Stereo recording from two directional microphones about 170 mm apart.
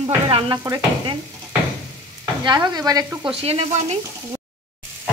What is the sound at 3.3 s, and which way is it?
Speech, 35° right (ahead or behind).